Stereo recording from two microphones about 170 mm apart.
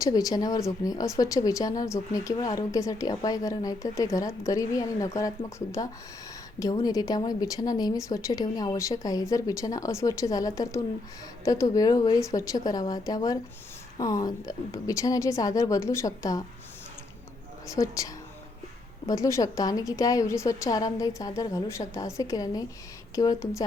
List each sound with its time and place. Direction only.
0.0 s speech: 20° left (ahead or behind)
17.7 s speech: 20° left (ahead or behind)